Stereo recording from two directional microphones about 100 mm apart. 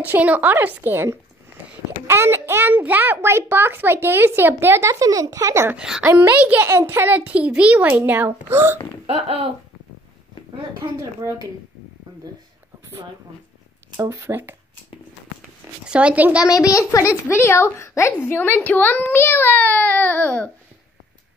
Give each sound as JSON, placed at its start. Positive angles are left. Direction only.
{"t": 0.0, "sound": "a woman's voice", "side_deg": -15}
{"t": 5.8, "sound": "a woman's voice", "side_deg": -10}
{"t": 6.7, "sound": "a child's voice", "side_deg": -25}
{"t": 9.0, "sound": "speech", "side_deg": -70}
{"t": 10.8, "sound": "speech", "side_deg": -30}
{"t": 13.9, "sound": "a child's voice", "side_deg": -25}
{"t": 15.8, "sound": "a woman's voice", "side_deg": -10}
{"t": 16.7, "sound": "a child's voice", "side_deg": 30}